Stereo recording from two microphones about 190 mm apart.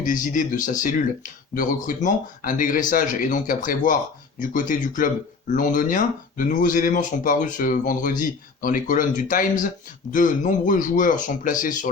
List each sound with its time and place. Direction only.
0.0 s speech: 45° left (ahead or behind)